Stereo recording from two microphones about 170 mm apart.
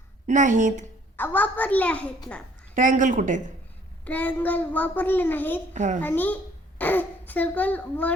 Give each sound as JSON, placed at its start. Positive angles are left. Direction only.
{"t": 0.3, "sound": "speech", "side_deg": -45}
{"t": 1.1, "sound": "a child's voice", "side_deg": 10}
{"t": 2.7, "sound": "speech", "side_deg": -50}
{"t": 4.0, "sound": "a child's voice", "side_deg": 10}
{"t": 5.7, "sound": "speech", "side_deg": -45}
{"t": 6.0, "sound": "a child's voice", "side_deg": 10}